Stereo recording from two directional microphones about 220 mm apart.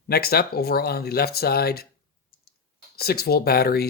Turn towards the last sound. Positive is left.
turn(degrees=45)  # may be behind; listen again after turning